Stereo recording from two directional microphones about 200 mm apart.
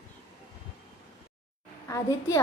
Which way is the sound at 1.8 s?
15° left (ahead or behind).